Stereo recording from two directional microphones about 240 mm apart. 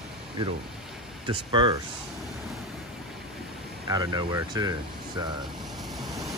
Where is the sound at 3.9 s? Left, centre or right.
Centre.